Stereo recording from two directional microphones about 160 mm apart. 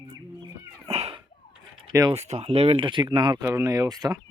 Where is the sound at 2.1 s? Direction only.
40° right (ahead or behind).